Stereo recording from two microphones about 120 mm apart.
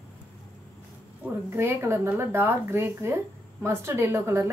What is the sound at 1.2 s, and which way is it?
A woman's voice, 20° right (ahead or behind).